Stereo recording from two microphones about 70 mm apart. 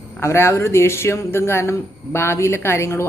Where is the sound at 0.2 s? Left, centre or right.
Left.